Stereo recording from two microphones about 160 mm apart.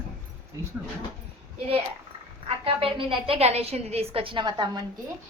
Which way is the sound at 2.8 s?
35° right (ahead or behind).